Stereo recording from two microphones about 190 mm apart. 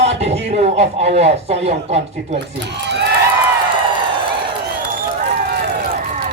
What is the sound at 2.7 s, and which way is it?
Speech, 65° right (ahead or behind).